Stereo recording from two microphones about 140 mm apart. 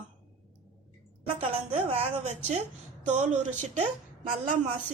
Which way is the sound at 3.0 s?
60° right (ahead or behind).